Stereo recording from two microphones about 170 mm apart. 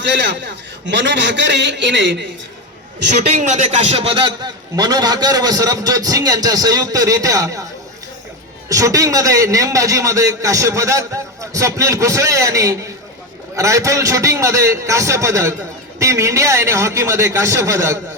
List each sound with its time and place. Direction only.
0.0 s a man's voice: 90° right
3.3 s a man's voice: 40° right (ahead or behind); by 7.7 s 20° right (ahead or behind)
8.7 s a man's voice: 20° right (ahead or behind)